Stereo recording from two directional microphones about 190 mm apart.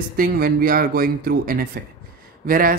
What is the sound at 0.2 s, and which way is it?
Speech, 50° right (ahead or behind).